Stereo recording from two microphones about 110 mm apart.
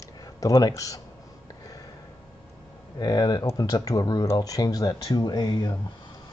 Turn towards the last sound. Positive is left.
turn(degrees=40)  # may be behind; listen again after turning